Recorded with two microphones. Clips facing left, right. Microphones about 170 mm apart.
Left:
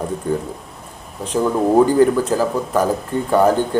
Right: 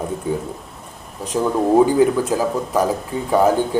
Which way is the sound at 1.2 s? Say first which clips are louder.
Left 1 dB; centre (ahead or behind).